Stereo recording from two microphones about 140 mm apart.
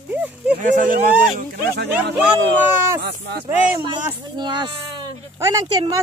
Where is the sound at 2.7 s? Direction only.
15° right (ahead or behind).